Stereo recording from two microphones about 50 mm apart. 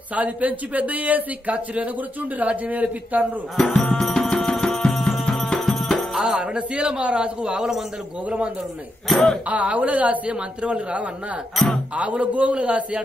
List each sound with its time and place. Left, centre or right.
0.1 s speech: right
3.5 s music: centre
6.2 s a man's voice: centre
9.1 s speech: centre
9.5 s a man's voice: right
11.5 s speech: centre
11.9 s a man's voice: right